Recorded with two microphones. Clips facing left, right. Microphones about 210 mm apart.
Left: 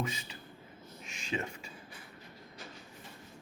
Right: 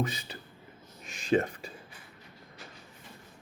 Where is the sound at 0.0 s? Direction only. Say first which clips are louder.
Right 5 dB; 35° right (ahead or behind).